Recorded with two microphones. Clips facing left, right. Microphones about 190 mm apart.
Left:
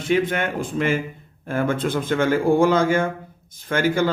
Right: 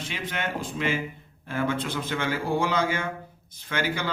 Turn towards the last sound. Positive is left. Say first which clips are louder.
# left 9 dB
turn(degrees=45)  # may be behind; listen again after turning